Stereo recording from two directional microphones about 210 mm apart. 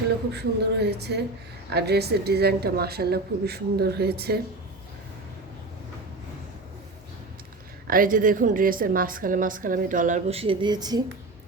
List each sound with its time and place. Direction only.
0.3 s a woman's voice: 50° right (ahead or behind)
7.9 s a woman's voice: 40° right (ahead or behind); by 11.0 s 20° right (ahead or behind)